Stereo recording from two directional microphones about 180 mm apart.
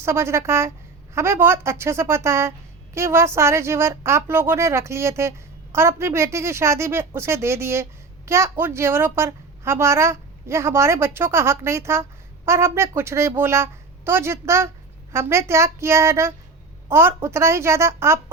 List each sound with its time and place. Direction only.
0.0 s a woman's voice: 15° right (ahead or behind)